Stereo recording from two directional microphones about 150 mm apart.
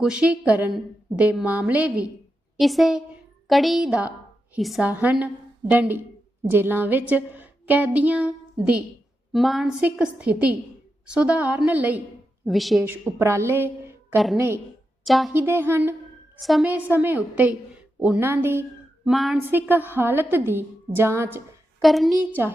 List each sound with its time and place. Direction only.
0.0 s a woman's voice: 5° right (ahead or behind)
9.3 s a woman's voice: centre (ahead or behind)
12.5 s a woman's voice: centre (ahead or behind)
12.8 s a woman's voice: 15° right (ahead or behind)
15.0 s a woman's voice: centre (ahead or behind)
15.4 s a woman's voice: 15° right (ahead or behind)
16.4 s a woman's voice: centre (ahead or behind)
16.7 s a woman's voice: 10° right (ahead or behind)
19.0 s a woman's voice: centre (ahead or behind)
19.4 s a woman's voice: 15° right (ahead or behind)
21.8 s a woman's voice: centre (ahead or behind)
22.2 s a woman's voice: 15° right (ahead or behind)